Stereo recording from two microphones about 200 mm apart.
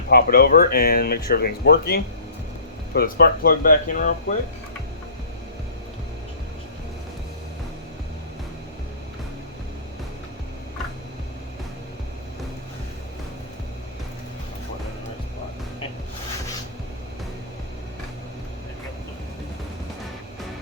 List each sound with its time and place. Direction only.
0.1 s speech: 50° left (ahead or behind)